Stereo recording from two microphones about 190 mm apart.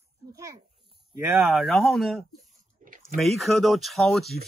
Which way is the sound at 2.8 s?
45° right (ahead or behind).